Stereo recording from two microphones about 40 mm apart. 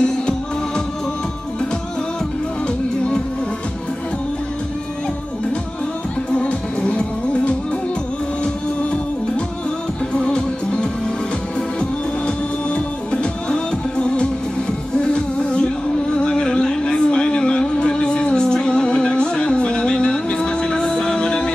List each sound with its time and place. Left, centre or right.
0.0 s music: left
6.3 s music: left
10.1 s music: left
12.3 s music: left
16.2 s a sound: left
20.8 s music: centre